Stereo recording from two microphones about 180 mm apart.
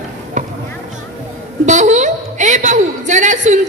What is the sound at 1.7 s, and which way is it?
A woman's voice, 40° right (ahead or behind).